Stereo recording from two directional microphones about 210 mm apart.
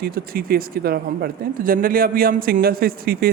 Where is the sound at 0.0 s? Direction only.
45° right (ahead or behind).